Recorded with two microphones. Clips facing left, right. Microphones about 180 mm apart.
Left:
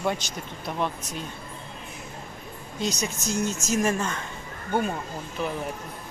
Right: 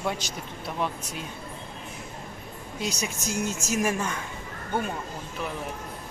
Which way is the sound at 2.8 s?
10° right (ahead or behind).